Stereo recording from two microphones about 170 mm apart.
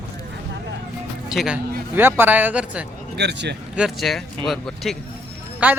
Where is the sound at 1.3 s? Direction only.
5° right (ahead or behind).